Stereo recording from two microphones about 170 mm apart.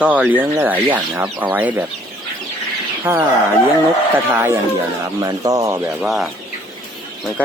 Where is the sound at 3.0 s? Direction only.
15° right (ahead or behind).